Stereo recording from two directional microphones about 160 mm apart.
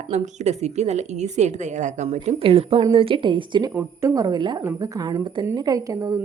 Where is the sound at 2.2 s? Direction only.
35° right (ahead or behind).